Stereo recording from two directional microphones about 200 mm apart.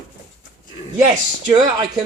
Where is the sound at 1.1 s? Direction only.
20° right (ahead or behind).